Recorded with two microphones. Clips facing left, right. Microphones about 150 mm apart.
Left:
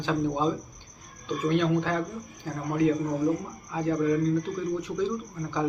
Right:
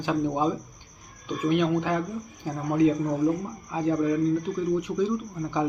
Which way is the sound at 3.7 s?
15° right (ahead or behind).